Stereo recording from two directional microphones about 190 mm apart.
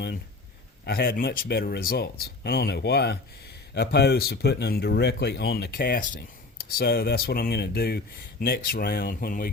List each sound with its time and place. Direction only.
0.9 s speech: 55° left (ahead or behind)